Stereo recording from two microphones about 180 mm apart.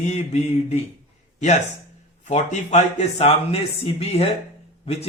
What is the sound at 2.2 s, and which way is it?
Speech, 40° left (ahead or behind).